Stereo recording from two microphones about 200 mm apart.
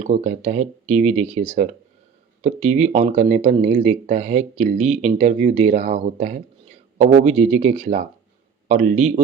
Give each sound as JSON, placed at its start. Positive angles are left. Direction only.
{"t": 0.0, "sound": "speech", "side_deg": -35}